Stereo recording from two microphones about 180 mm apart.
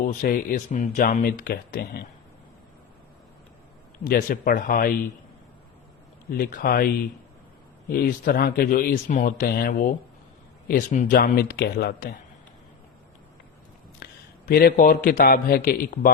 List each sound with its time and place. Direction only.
0.0 s speech: 50° left (ahead or behind)
4.0 s speech: 50° left (ahead or behind)
6.3 s speech: 55° left (ahead or behind)
14.0 s a man's voice: 55° left (ahead or behind)